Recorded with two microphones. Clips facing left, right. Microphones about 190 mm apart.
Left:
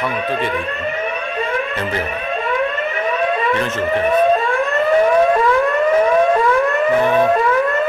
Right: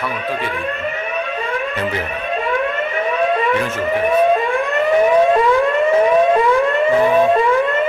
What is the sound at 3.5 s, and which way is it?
Siren, 10° right (ahead or behind).